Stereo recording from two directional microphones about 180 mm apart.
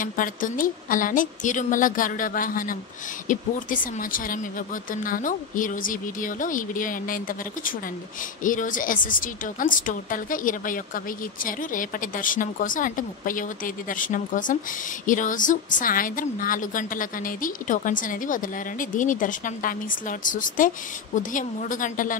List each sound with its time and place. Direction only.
0.0 s a woman's voice: 50° left (ahead or behind)
8.5 s a woman's voice: 45° left (ahead or behind)